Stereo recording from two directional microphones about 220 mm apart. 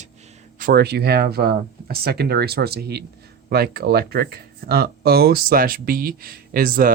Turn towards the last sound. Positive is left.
turn(degrees=-40)  # may be behind; listen again after turning